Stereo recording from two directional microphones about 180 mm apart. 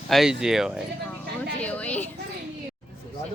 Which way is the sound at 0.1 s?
Centre (ahead or behind).